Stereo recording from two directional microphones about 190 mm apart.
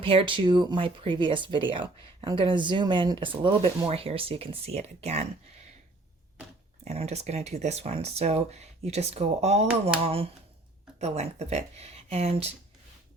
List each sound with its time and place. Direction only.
0.0 s speech: 30° right (ahead or behind)
6.8 s speech: 35° right (ahead or behind)